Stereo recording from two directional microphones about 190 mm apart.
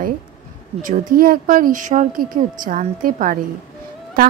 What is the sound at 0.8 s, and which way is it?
A woman's voice, 45° right (ahead or behind).